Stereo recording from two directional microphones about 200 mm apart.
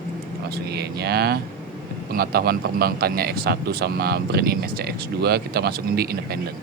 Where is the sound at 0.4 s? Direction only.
55° right (ahead or behind).